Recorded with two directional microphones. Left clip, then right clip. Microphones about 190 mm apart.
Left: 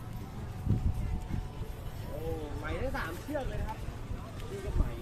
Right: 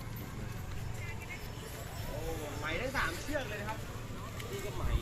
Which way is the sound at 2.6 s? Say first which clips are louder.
Right 3 dB; 60° left (ahead or behind).